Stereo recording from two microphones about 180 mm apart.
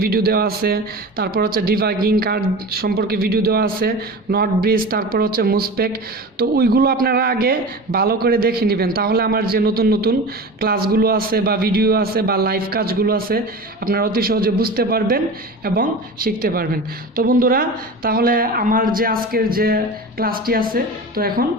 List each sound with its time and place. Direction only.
0.0 s speech: 60° right (ahead or behind)